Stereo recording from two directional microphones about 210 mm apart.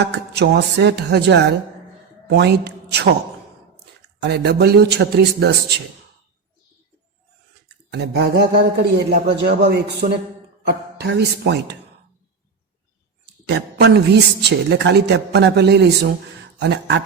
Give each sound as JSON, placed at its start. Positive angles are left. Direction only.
{"t": 0.0, "sound": "a man's voice", "side_deg": -55}
{"t": 4.2, "sound": "a man's voice", "side_deg": -55}
{"t": 7.9, "sound": "a man's voice", "side_deg": -55}
{"t": 13.5, "sound": "a man's voice", "side_deg": -55}